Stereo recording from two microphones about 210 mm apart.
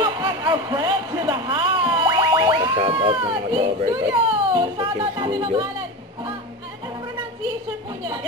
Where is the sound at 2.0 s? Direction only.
20° right (ahead or behind).